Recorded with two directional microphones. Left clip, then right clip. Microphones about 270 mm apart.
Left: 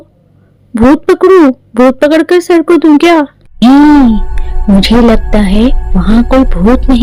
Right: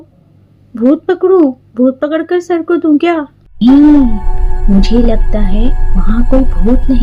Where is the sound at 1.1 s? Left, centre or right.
Left.